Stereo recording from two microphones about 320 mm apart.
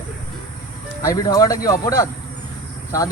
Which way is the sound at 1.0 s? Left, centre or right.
Centre.